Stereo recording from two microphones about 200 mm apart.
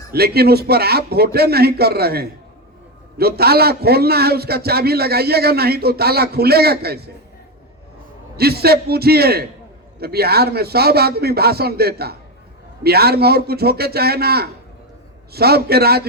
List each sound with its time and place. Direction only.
0.1 s a man's voice: 50° right (ahead or behind)
8.4 s a man's voice: 50° right (ahead or behind)